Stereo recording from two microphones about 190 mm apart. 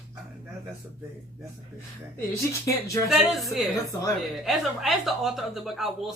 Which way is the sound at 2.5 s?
15° left (ahead or behind).